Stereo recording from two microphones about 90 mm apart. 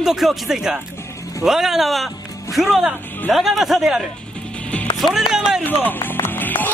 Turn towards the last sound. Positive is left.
turn(degrees=20)  # may be behind; listen again after turning